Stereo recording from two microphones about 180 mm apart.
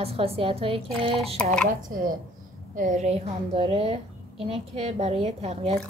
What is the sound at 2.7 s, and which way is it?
A woman's voice, 45° right (ahead or behind).